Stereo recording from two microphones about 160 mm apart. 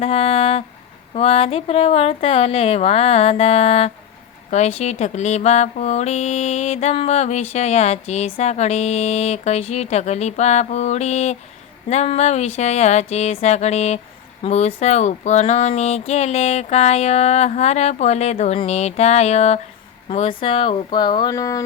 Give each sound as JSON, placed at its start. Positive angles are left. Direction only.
{"t": 0.0, "sound": "a sound", "side_deg": 40}
{"t": 1.1, "sound": "speech", "side_deg": 40}
{"t": 4.5, "sound": "mantra", "side_deg": 45}
{"t": 20.1, "sound": "speech", "side_deg": 35}